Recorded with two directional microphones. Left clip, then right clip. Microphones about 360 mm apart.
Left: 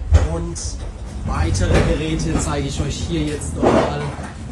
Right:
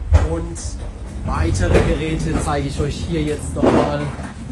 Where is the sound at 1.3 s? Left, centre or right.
Centre.